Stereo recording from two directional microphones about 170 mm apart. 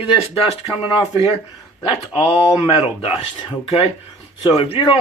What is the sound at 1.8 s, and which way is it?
Speech, 30° left (ahead or behind).